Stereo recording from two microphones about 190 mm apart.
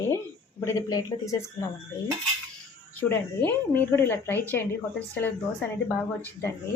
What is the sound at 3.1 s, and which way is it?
A woman's voice, 10° left (ahead or behind).